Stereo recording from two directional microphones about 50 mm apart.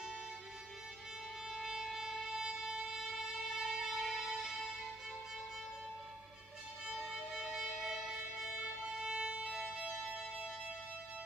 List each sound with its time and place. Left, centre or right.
1.6 s music: centre
7.3 s music: centre
9.0 s violin: centre
9.3 s music: centre